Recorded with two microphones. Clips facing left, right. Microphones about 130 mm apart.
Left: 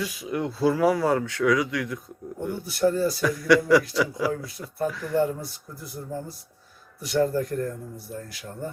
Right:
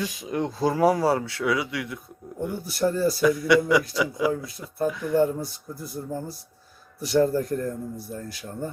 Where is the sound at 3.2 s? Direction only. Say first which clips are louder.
Even; 20° right (ahead or behind).